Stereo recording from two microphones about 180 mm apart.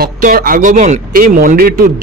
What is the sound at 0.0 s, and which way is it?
A man's voice, 55° right (ahead or behind).